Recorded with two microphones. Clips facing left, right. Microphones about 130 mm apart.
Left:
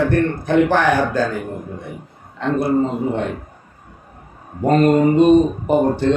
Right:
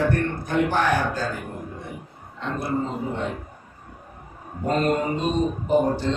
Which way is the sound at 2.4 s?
70° left (ahead or behind).